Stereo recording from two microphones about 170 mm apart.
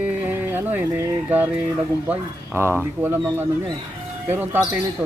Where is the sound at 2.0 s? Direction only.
15° right (ahead or behind).